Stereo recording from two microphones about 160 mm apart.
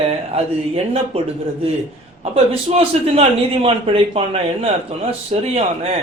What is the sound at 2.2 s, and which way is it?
Speech, 40° right (ahead or behind).